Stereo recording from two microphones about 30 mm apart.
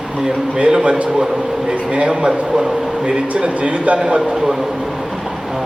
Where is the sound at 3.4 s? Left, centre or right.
Right.